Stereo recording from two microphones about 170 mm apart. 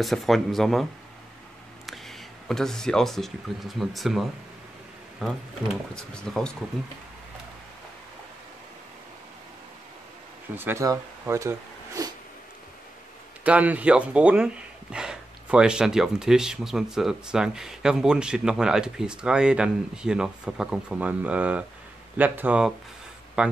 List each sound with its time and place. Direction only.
0.0 s speech: centre (ahead or behind)
1.9 s speech: centre (ahead or behind)
10.5 s speech: 15° right (ahead or behind)
13.4 s speech: 10° right (ahead or behind)